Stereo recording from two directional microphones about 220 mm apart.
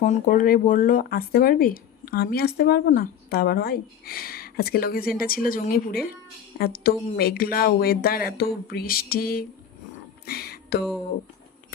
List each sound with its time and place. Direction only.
0.0 s speech: 35° left (ahead or behind)